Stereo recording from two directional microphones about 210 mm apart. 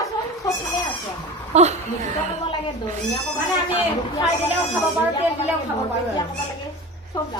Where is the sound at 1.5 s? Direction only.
35° right (ahead or behind).